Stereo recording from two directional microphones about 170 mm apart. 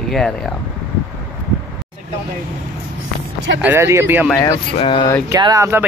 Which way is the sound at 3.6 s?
15° right (ahead or behind).